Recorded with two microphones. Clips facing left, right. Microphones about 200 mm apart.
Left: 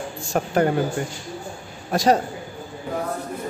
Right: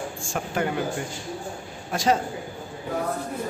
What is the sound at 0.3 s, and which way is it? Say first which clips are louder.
Speech: left 7 dB; 40° left (ahead or behind).